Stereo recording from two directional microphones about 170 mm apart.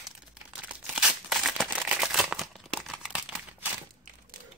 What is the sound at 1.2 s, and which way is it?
Crumpling, 5° right (ahead or behind).